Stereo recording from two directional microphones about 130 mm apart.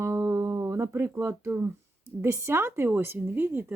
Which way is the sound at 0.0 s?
20° right (ahead or behind).